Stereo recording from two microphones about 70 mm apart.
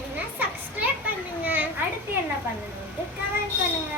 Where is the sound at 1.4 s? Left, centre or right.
Right.